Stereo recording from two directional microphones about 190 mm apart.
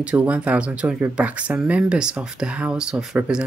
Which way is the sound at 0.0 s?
5° right (ahead or behind).